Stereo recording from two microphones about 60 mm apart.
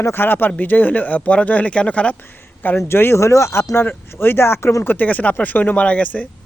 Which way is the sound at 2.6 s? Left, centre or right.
Left.